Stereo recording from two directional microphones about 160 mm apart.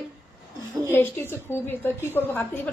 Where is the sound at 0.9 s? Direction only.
15° left (ahead or behind).